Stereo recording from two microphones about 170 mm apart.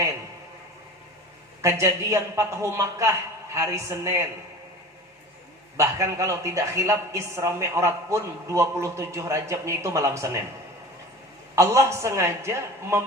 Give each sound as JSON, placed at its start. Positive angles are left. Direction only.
{"t": 1.6, "sound": "a woman's voice", "side_deg": -15}
{"t": 5.7, "sound": "a woman's voice", "side_deg": -20}
{"t": 11.5, "sound": "a woman's voice", "side_deg": -15}